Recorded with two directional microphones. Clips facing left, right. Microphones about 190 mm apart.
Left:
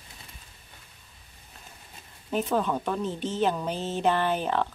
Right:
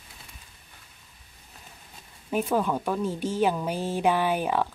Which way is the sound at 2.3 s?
10° right (ahead or behind).